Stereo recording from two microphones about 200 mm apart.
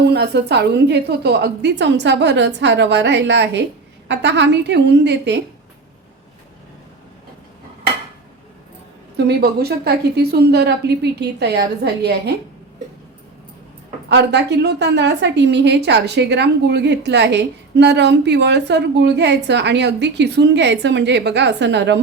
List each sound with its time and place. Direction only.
0.0 s a woman's voice: 55° right (ahead or behind)
9.1 s a woman's voice: 55° right (ahead or behind)
14.1 s a woman's voice: 60° right (ahead or behind)